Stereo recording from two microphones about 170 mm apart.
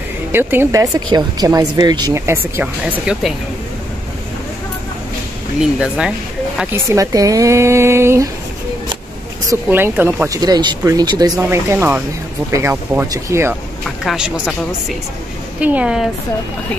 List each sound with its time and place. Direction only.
0.3 s speech: 15° right (ahead or behind)
5.6 s speech: 5° right (ahead or behind)
6.6 s speech: 15° right (ahead or behind)
9.5 s speech: 15° right (ahead or behind)
13.8 s speech: centre (ahead or behind)